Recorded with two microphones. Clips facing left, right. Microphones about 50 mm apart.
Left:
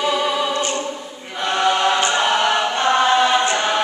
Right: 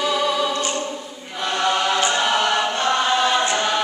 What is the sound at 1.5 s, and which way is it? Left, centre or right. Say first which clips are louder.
Choir: left 3 dB; centre.